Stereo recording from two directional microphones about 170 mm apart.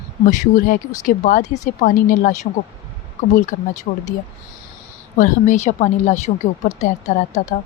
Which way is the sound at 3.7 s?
45° left (ahead or behind).